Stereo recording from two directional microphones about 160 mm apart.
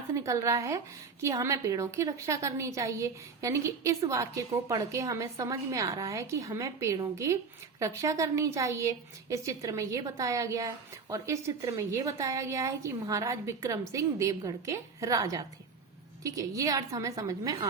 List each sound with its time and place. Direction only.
0.1 s a woman's voice: 20° right (ahead or behind)